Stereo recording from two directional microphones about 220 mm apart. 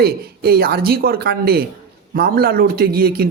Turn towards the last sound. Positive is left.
turn(degrees=-45)  # may be behind; listen again after turning